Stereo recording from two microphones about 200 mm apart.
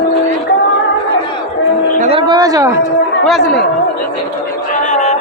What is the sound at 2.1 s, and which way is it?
Speech, 20° right (ahead or behind).